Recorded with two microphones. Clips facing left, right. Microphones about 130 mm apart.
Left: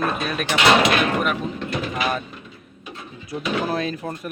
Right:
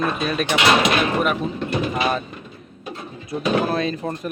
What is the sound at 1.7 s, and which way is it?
Speech, 25° right (ahead or behind).